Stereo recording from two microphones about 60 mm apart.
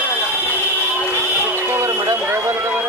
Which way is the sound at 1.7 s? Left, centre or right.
Right.